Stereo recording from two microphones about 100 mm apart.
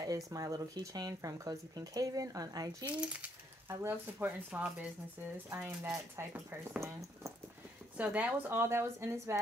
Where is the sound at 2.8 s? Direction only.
15° right (ahead or behind).